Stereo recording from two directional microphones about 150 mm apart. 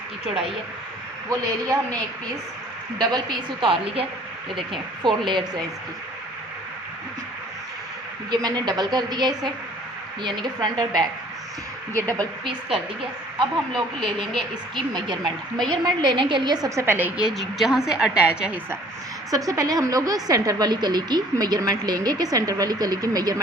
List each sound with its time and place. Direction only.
3.0 s speech: 30° right (ahead or behind)
8.3 s a woman's voice: 25° right (ahead or behind)
13.0 s a woman's voice: 35° right (ahead or behind); by 18.8 s 10° right (ahead or behind)
19.3 s a woman's voice: 25° right (ahead or behind)